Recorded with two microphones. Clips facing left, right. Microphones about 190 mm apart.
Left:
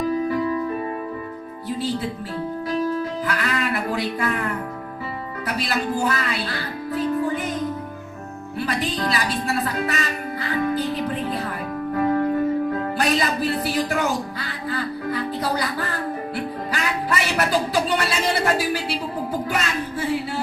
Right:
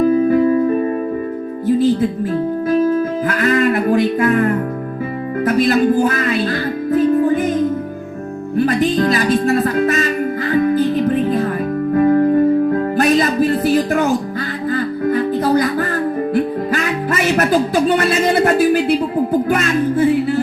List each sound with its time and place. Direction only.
0.0 s music: 50° right (ahead or behind)
5.5 s speech: 50° right (ahead or behind)
8.5 s speech: 45° right (ahead or behind)
10.5 s music: 45° right (ahead or behind)